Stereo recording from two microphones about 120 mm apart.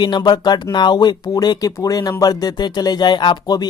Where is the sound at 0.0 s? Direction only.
35° left (ahead or behind).